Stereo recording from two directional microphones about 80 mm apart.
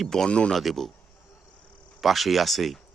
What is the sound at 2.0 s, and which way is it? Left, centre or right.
Speech, centre.